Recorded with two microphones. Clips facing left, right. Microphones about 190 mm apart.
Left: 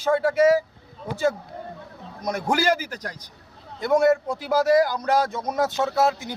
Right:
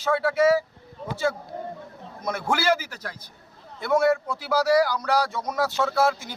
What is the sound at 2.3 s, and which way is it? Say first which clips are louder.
Speech: left 2 dB; 40° left (ahead or behind).